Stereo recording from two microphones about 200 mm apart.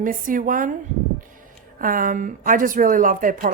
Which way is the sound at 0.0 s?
40° right (ahead or behind).